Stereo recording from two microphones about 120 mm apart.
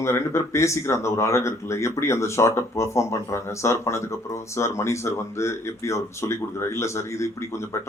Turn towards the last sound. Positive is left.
turn(degrees=25)  # may be behind; listen again after turning